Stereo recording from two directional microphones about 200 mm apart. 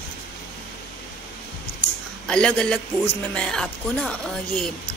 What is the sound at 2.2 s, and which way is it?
Speech, 5° left (ahead or behind).